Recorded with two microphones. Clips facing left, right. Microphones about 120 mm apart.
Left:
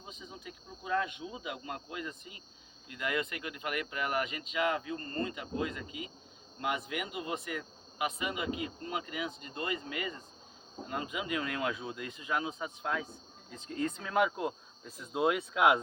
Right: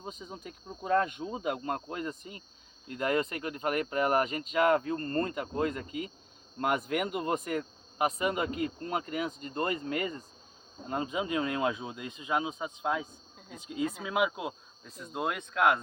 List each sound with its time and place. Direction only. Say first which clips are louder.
0.0 s speech: right 5 dB; 45° right (ahead or behind)
10.8 s speech: right 5 dB; 30° right (ahead or behind); by 15.8 s 10° left (ahead or behind)